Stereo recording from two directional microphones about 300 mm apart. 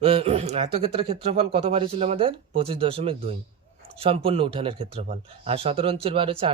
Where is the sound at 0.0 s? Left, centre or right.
Centre.